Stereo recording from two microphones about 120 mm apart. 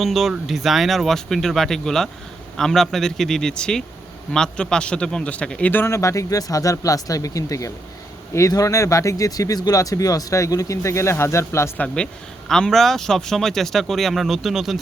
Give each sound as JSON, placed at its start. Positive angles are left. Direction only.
{"t": 0.0, "sound": "speech", "side_deg": 0}
{"t": 12.5, "sound": "speech", "side_deg": 5}